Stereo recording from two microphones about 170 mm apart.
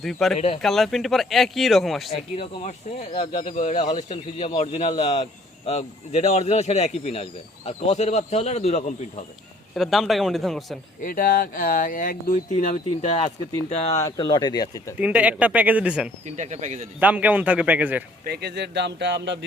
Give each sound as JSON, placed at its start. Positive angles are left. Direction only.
{"t": 0.0, "sound": "speech", "side_deg": 0}
{"t": 0.3, "sound": "speech", "side_deg": 40}
{"t": 0.6, "sound": "speech", "side_deg": 0}
{"t": 2.1, "sound": "speech", "side_deg": 35}
{"t": 9.7, "sound": "speech", "side_deg": 0}
{"t": 11.0, "sound": "speech", "side_deg": 55}
{"t": 13.9, "sound": "speech", "side_deg": 20}
{"t": 14.9, "sound": "speech", "side_deg": -10}
{"t": 16.2, "sound": "speech", "side_deg": -40}
{"t": 17.0, "sound": "speech", "side_deg": -10}
{"t": 18.3, "sound": "speech", "side_deg": -70}